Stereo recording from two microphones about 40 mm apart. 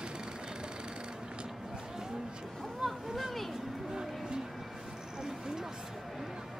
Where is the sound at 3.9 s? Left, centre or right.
Centre.